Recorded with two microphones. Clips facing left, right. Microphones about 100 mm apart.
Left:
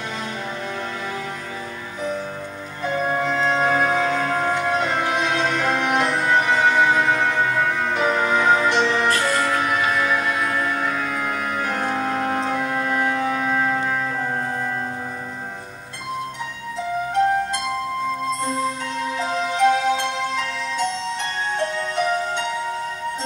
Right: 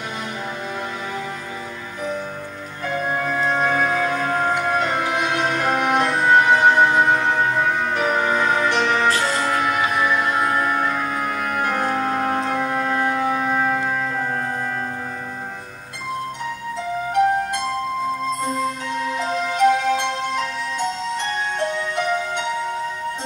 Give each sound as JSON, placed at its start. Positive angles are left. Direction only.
{"t": 3.2, "sound": "music", "side_deg": 25}
{"t": 5.4, "sound": "music", "side_deg": -15}
{"t": 8.2, "sound": "music", "side_deg": 20}
{"t": 9.1, "sound": "music", "side_deg": -25}
{"t": 10.2, "sound": "music", "side_deg": -35}
{"t": 10.5, "sound": "music", "side_deg": -25}
{"t": 11.0, "sound": "music", "side_deg": 90}
{"t": 11.4, "sound": "music", "side_deg": -60}
{"t": 11.7, "sound": "music", "side_deg": -20}
{"t": 19.1, "sound": "music", "side_deg": 20}